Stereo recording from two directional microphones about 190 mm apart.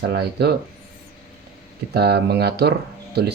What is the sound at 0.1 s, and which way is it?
Speech, 60° right (ahead or behind).